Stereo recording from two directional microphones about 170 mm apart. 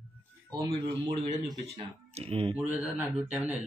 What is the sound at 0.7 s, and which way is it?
Speech, 45° right (ahead or behind).